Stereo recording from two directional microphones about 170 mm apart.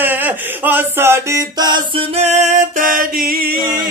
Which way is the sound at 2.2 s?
40° right (ahead or behind).